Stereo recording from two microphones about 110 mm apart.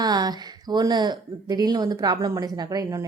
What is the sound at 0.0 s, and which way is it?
Speech, 35° right (ahead or behind).